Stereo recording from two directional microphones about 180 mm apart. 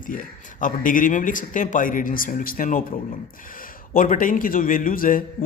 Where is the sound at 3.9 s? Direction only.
50° left (ahead or behind).